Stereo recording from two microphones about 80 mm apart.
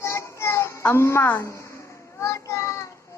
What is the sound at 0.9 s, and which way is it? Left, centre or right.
Speech, left.